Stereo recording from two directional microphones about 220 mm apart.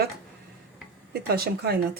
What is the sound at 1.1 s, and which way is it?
Speech, 45° right (ahead or behind).